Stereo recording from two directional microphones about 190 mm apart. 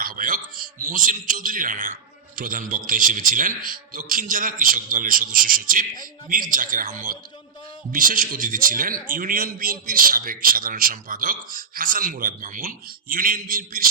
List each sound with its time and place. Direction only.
0.0 s a man's voice: 45° right (ahead or behind)